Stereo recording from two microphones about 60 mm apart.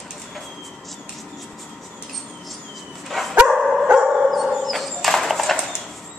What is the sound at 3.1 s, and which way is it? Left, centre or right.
Bow-wow, centre.